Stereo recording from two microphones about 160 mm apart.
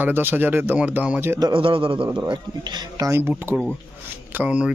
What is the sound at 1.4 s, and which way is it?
A man's voice, 35° right (ahead or behind).